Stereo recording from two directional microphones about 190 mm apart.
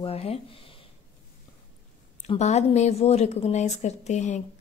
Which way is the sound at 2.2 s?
35° left (ahead or behind).